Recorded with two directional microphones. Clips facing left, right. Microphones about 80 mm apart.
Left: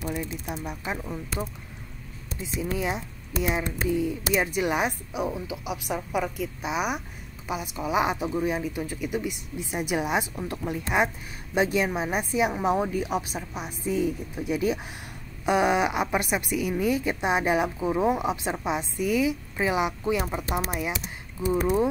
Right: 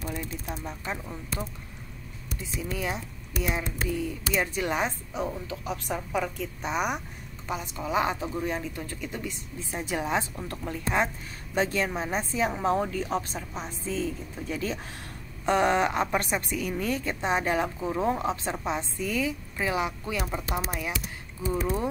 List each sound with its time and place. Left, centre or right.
0.7 s a woman's voice: centre
2.4 s a woman's voice: left